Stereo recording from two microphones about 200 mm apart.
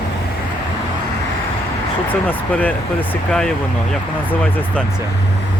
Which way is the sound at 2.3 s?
10° left (ahead or behind).